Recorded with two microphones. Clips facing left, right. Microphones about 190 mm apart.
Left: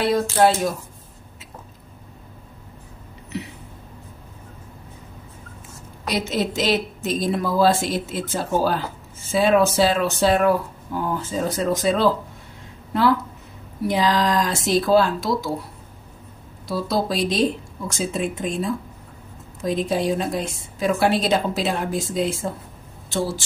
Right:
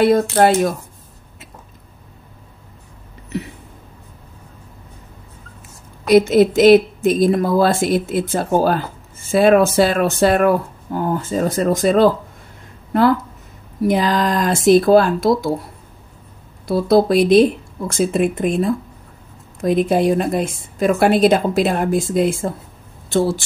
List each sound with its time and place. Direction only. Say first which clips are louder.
0.0 s a woman's voice: right 5 dB; 60° right (ahead or behind)
6.0 s a woman's voice: right 12 dB; 55° right (ahead or behind)
13.8 s speech: right 3 dB; 50° right (ahead or behind)
16.6 s a woman's voice: right 9 dB; 55° right (ahead or behind)